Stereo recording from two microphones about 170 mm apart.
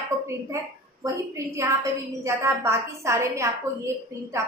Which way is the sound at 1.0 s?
20° right (ahead or behind).